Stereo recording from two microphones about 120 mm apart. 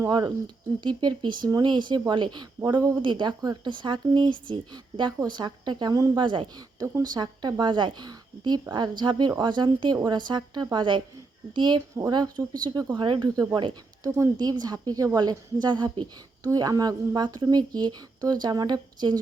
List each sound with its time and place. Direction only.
0.0 s speech: 35° right (ahead or behind)